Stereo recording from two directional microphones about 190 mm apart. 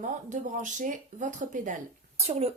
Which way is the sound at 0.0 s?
40° right (ahead or behind).